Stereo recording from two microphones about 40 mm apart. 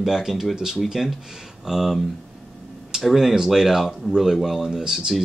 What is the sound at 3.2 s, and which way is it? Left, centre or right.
Speech, centre.